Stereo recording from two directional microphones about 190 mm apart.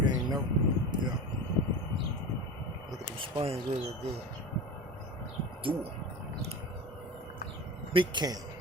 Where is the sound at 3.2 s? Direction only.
30° right (ahead or behind).